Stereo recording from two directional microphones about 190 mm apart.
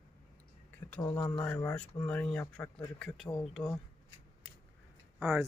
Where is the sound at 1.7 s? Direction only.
15° left (ahead or behind).